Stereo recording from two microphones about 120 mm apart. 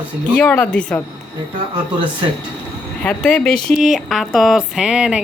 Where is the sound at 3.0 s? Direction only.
10° left (ahead or behind).